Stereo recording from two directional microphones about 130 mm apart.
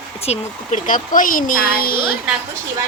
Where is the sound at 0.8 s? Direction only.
90° left.